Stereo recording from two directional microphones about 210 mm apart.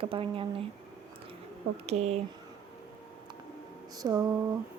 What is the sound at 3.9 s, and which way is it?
Speech, 15° right (ahead or behind).